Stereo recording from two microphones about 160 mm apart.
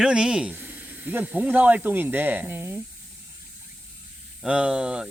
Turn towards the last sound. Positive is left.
turn(degrees=-5)  # may be behind; listen again after turning